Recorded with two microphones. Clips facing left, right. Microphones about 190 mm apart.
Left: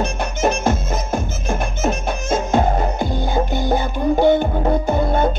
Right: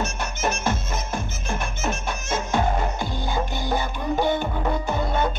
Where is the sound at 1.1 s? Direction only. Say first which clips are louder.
Left 8 dB; 50° left (ahead or behind).